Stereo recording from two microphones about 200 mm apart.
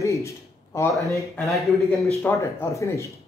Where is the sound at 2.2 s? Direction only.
10° left (ahead or behind).